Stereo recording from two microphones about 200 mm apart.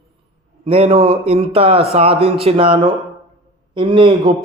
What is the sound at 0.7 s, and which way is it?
A man's voice, 30° right (ahead or behind).